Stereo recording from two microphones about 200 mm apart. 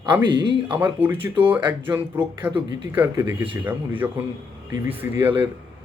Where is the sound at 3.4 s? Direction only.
25° right (ahead or behind).